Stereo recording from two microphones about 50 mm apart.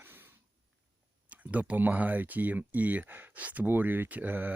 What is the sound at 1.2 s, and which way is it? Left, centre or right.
Speech, right.